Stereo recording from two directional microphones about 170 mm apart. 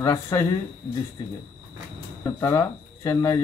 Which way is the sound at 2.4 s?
15° left (ahead or behind).